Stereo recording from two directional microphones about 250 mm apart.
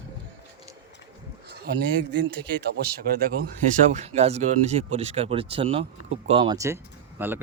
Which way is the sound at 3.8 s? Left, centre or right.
Right.